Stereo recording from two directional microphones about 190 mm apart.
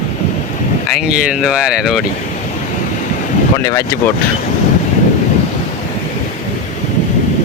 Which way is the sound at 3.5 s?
15° left (ahead or behind).